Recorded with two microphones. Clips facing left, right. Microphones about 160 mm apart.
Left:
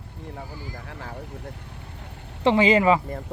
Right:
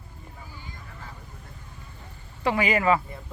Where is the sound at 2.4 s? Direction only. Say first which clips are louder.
Left 6 dB; 25° left (ahead or behind).